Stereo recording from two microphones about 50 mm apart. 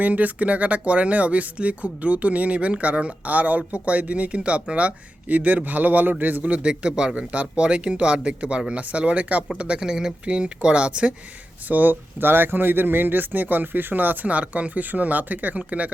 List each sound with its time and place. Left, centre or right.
0.0 s speech: right
11.7 s speech: right